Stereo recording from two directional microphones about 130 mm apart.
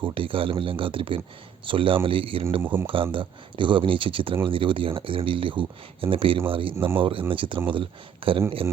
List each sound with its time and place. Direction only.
0.0 s speech: 40° right (ahead or behind)
2.6 s speech: 15° right (ahead or behind)
2.8 s speech: 40° right (ahead or behind)